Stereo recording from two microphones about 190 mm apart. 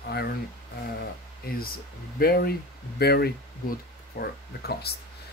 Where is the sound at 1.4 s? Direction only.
55° left (ahead or behind).